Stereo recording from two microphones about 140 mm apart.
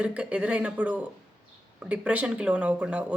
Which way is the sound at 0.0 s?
10° right (ahead or behind).